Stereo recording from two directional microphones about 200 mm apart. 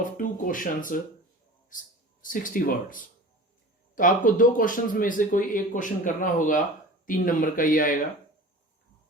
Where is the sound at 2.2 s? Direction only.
40° left (ahead or behind).